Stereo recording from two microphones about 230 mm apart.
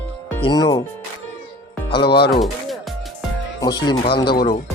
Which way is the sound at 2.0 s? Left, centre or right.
Left.